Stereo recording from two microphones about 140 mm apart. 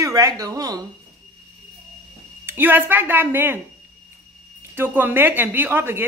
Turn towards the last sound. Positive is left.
turn(degrees=-15)  # may be behind; listen again after turning